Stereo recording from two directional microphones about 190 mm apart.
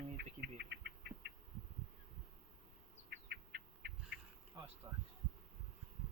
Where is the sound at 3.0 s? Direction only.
60° right (ahead or behind).